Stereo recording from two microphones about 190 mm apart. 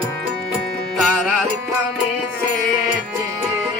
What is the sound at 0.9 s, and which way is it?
Music, 5° right (ahead or behind).